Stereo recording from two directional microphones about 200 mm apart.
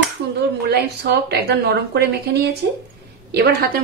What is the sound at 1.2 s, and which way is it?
Speech, 55° right (ahead or behind).